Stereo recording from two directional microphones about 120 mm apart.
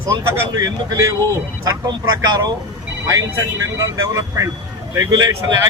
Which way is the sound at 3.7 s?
30° right (ahead or behind).